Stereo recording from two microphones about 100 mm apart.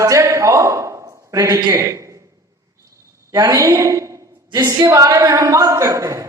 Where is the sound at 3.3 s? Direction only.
35° right (ahead or behind).